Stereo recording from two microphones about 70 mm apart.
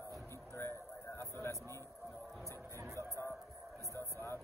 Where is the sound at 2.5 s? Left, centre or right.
Right.